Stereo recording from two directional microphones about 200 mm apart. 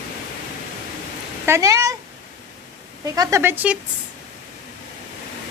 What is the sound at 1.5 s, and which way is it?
Speech, 15° right (ahead or behind).